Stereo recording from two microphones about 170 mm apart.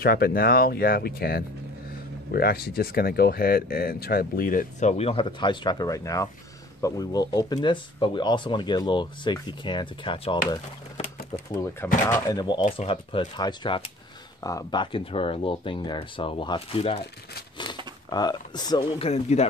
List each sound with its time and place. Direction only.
0.0 s speech: 65° left (ahead or behind); by 10.4 s 30° left (ahead or behind)
11.0 s bird: 65° left (ahead or behind)
11.5 s speech: 15° left (ahead or behind)
12.1 s speech: 25° left (ahead or behind)
18.1 s speech: 25° left (ahead or behind); by 19.4 s 40° left (ahead or behind)